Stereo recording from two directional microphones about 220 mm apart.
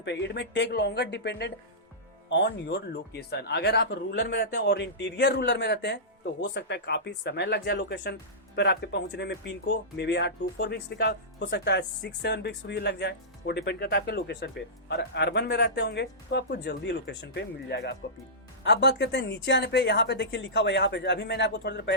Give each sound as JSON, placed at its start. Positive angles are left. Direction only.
{"t": 0.0, "sound": "speech", "side_deg": 50}